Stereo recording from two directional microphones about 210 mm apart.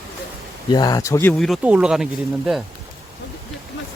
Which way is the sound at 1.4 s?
5° right (ahead or behind).